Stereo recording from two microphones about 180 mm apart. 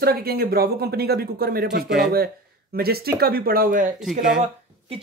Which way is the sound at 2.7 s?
60° right (ahead or behind).